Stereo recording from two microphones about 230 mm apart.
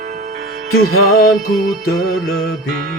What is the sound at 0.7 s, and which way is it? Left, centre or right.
Music, left.